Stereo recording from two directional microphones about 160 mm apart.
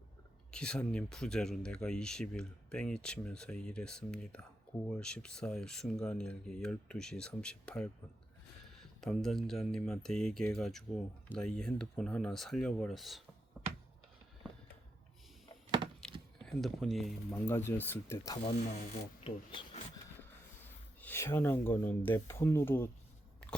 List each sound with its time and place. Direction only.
0.5 s speech: 5° left (ahead or behind)
9.0 s speech: centre (ahead or behind)
16.0 s a sound: 5° left (ahead or behind)
16.5 s speech: centre (ahead or behind)
17.3 s speech: 15° left (ahead or behind)
18.4 s speech: 45° left (ahead or behind)
21.0 s speech: 15° left (ahead or behind)